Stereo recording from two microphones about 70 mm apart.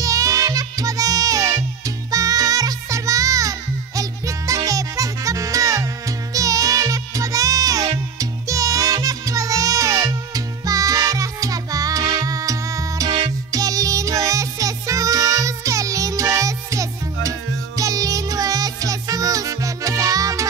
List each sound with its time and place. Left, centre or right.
0.0 s music: right